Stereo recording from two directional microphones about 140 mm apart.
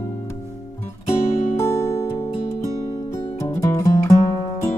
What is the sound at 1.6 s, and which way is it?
Music, 20° left (ahead or behind).